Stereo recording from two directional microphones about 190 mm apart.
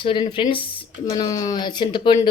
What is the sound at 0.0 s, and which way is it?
Speech, 25° left (ahead or behind).